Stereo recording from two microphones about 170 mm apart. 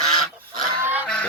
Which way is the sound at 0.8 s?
10° right (ahead or behind).